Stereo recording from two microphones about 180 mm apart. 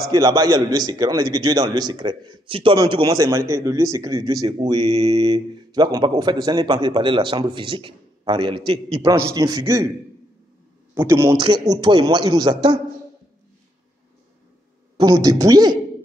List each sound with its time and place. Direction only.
0.1 s a man's voice: 20° right (ahead or behind)
4.7 s a man's voice: 35° right (ahead or behind)
9.1 s a man's voice: 20° right (ahead or behind)
11.0 s a man's voice: 15° right (ahead or behind)
15.0 s a man's voice: 20° right (ahead or behind)